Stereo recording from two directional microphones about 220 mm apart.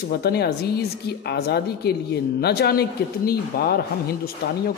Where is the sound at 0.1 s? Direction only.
45° left (ahead or behind).